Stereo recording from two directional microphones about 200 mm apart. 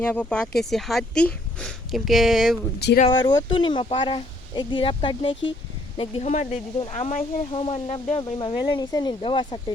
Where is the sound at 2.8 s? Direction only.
55° left (ahead or behind).